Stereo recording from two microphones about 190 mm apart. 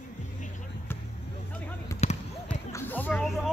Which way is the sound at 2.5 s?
10° left (ahead or behind).